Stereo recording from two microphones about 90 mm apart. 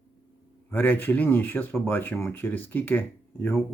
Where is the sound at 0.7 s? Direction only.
20° left (ahead or behind).